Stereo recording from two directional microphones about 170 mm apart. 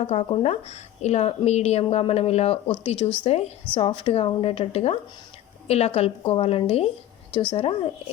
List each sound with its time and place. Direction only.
0.0 s a woman's voice: 40° left (ahead or behind)